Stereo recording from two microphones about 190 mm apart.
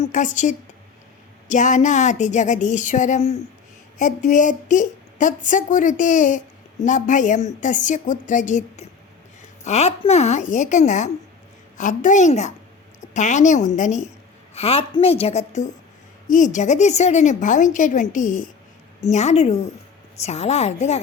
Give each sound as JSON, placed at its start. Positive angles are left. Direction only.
{"t": 0.0, "sound": "a woman's voice", "side_deg": 40}